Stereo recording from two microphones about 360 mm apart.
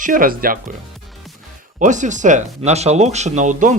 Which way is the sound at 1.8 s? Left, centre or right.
Right.